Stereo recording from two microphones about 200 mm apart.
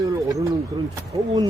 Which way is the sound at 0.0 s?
15° right (ahead or behind).